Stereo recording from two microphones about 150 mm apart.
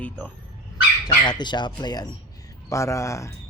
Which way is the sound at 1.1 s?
30° left (ahead or behind).